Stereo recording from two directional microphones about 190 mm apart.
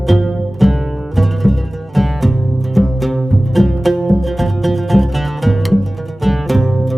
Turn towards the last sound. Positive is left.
turn(degrees=0)  # may be behind; listen again after turning